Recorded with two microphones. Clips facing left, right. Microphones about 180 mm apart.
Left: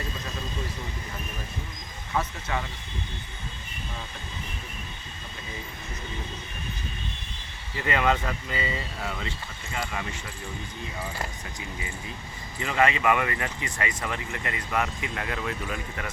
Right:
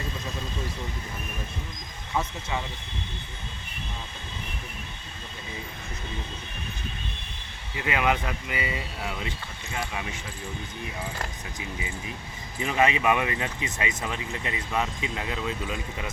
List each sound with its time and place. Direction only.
7.8 s speech: 10° right (ahead or behind)
12.5 s speech: 15° right (ahead or behind)